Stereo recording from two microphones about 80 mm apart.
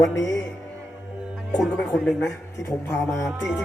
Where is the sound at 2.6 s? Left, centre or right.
Left.